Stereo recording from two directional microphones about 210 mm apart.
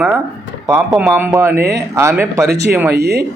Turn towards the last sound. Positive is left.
turn(degrees=-50)  # may be behind; listen again after turning